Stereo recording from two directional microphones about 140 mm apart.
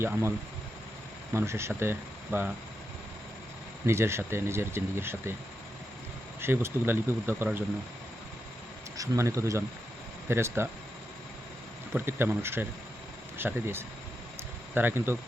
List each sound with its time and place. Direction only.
0.0 s speech: 20° right (ahead or behind)
3.8 s speech: 20° right (ahead or behind)
6.4 s speech: 15° right (ahead or behind)
9.0 s speech: 20° right (ahead or behind)
11.9 s speech: 15° right (ahead or behind)